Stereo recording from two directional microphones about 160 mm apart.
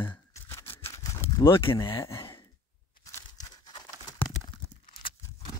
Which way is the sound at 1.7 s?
15° left (ahead or behind).